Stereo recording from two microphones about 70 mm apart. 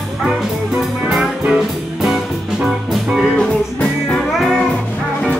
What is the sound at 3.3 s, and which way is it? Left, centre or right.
Music, centre.